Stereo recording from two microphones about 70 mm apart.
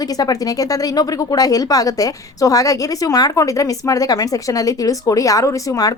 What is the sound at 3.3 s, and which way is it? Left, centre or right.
Speech, left.